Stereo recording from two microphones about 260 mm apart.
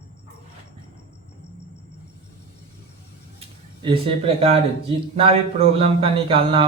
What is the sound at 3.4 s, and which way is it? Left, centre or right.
A man's voice, right.